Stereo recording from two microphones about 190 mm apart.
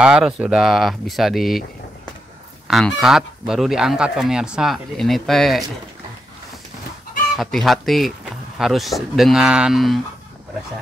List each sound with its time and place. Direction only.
0.0 s goose: 5° right (ahead or behind)
2.7 s goose: centre (ahead or behind)
7.3 s goose: centre (ahead or behind)